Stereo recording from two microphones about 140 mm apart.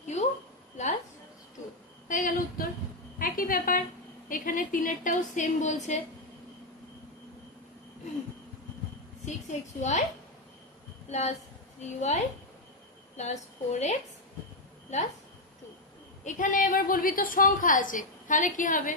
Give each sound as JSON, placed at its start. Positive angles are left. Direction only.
{"t": 0.0, "sound": "a sound", "side_deg": 55}
{"t": 2.0, "sound": "a sound", "side_deg": 65}
{"t": 4.3, "sound": "a woman's voice", "side_deg": 75}
{"t": 9.2, "sound": "a woman's voice", "side_deg": 55}
{"t": 11.1, "sound": "a woman's voice", "side_deg": 55}
{"t": 16.3, "sound": "a woman's voice", "side_deg": 70}